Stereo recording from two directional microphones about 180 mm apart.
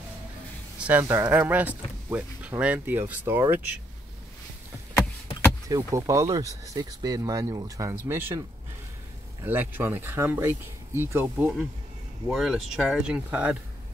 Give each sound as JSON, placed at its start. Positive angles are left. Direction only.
{"t": 0.7, "sound": "speech", "side_deg": -10}
{"t": 5.7, "sound": "speech", "side_deg": -20}